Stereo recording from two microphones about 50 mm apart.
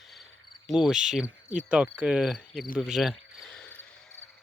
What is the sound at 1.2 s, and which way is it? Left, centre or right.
Cricket, right.